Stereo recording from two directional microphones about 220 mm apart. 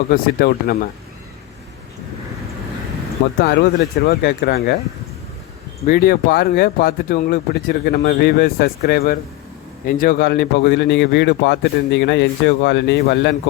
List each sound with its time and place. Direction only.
0.1 s speech: 45° left (ahead or behind)
3.4 s speech: 45° left (ahead or behind)
5.8 s speech: 40° left (ahead or behind)